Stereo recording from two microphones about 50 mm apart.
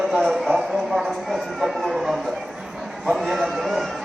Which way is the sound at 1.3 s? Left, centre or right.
Centre.